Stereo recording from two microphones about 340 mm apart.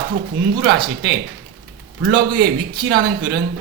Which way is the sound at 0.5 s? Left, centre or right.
Right.